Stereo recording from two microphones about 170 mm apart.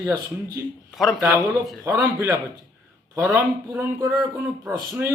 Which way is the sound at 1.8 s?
15° right (ahead or behind).